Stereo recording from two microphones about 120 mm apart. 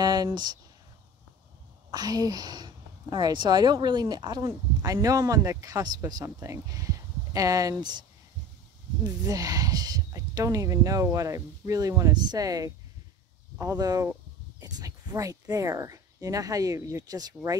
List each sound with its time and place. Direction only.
0.0 s speech: 30° right (ahead or behind)
1.9 s speech: 35° right (ahead or behind)
9.2 s speech: 30° right (ahead or behind)